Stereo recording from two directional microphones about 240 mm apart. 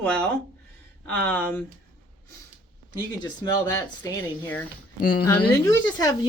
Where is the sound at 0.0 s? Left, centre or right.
Centre.